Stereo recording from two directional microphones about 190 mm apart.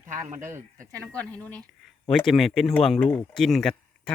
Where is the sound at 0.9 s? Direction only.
5° left (ahead or behind).